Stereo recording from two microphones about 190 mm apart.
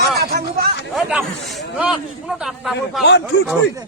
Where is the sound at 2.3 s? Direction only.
5° right (ahead or behind).